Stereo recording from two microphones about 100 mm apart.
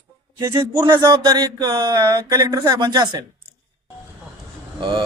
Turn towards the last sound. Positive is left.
turn(degrees=-55)  # may be behind; listen again after turning